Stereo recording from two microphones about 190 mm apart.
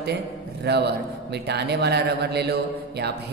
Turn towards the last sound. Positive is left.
turn(degrees=-60)  # may be behind; listen again after turning